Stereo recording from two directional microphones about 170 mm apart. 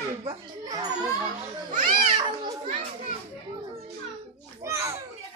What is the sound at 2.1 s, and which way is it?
Children playing, 30° right (ahead or behind).